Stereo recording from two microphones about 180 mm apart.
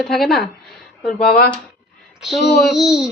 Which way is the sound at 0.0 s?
Centre (ahead or behind).